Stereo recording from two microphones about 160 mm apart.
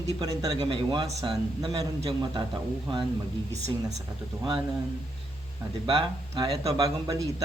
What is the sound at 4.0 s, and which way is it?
Speech, 25° right (ahead or behind).